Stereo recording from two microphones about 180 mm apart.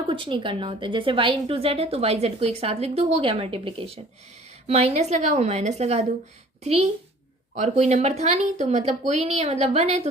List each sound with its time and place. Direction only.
0.1 s a woman's voice: 25° right (ahead or behind)
7.5 s a woman's voice: 40° right (ahead or behind)